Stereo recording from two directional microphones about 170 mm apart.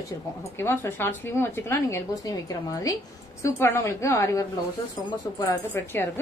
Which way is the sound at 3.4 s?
15° left (ahead or behind).